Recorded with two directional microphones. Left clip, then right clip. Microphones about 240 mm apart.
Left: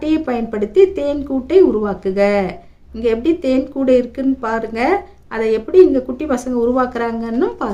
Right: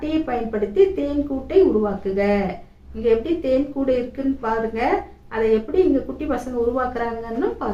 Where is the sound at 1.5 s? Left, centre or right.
Left.